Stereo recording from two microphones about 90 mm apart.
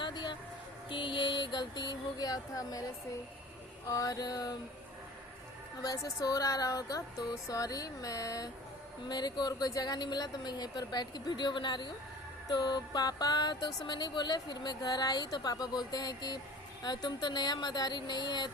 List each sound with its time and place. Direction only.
0.0 s music: 55° left (ahead or behind)
0.9 s a sound: 65° left (ahead or behind); by 2.9 s 45° left (ahead or behind)
3.8 s music: 40° left (ahead or behind)
5.8 s music: 45° left (ahead or behind)
9.0 s music: 50° left (ahead or behind)